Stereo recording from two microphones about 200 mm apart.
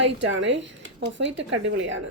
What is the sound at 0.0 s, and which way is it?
A woman's voice, 65° right (ahead or behind).